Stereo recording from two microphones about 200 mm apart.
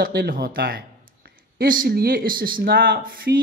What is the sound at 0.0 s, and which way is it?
Speech, 50° right (ahead or behind).